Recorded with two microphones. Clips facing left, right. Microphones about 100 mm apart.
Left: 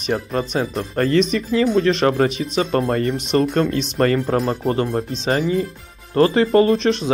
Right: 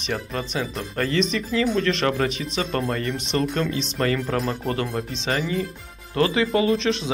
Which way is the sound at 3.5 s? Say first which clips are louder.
Left 6 dB; 50° left (ahead or behind).